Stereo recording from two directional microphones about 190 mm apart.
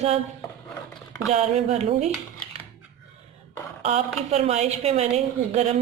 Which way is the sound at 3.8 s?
35° right (ahead or behind).